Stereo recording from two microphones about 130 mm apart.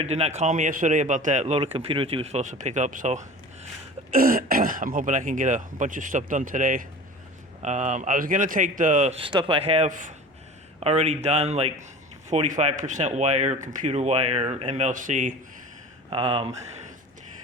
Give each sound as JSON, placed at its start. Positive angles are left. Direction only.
{"t": 0.0, "sound": "a man's voice", "side_deg": -55}
{"t": 4.1, "sound": "speech", "side_deg": -90}
{"t": 7.6, "sound": "speech", "side_deg": -65}
{"t": 9.2, "sound": "speech", "side_deg": -40}
{"t": 9.9, "sound": "speech", "side_deg": -80}
{"t": 10.8, "sound": "a man's voice", "side_deg": -55}
{"t": 16.0, "sound": "speech", "side_deg": -45}